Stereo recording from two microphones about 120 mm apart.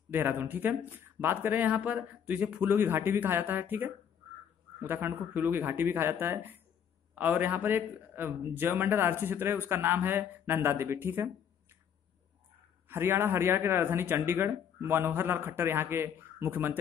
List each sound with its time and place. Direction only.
0.1 s a man's voice: 15° right (ahead or behind)
12.8 s speech: 20° right (ahead or behind)